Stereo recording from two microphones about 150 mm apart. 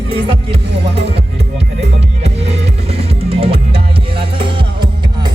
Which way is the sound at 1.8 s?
45° right (ahead or behind).